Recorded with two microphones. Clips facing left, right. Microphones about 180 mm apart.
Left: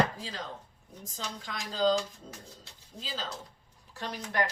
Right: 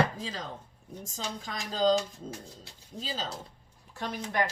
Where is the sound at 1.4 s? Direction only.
45° right (ahead or behind).